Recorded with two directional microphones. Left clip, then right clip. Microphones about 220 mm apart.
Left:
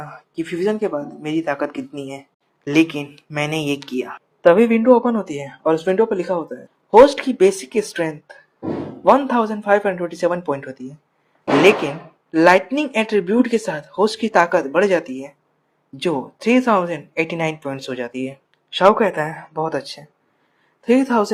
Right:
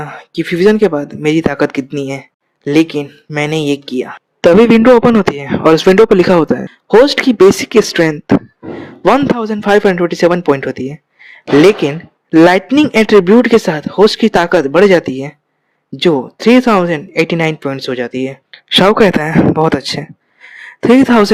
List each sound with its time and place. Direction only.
0.0 s speech: 45° right (ahead or behind)
4.4 s speech: 55° right (ahead or behind)
7.8 s speech: 45° right (ahead or behind)
9.0 s speech: 60° right (ahead or behind)
11.6 s speech: 45° right (ahead or behind)
14.6 s speech: 40° right (ahead or behind)
16.0 s speech: 55° right (ahead or behind)
20.6 s a sound: 45° right (ahead or behind)